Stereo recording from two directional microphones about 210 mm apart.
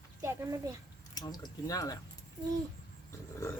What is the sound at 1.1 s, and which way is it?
Speech, 20° left (ahead or behind).